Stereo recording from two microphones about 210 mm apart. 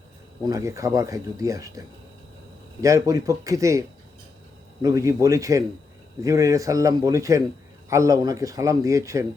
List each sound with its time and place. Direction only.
0.4 s speech: 15° right (ahead or behind)
2.8 s speech: 15° right (ahead or behind)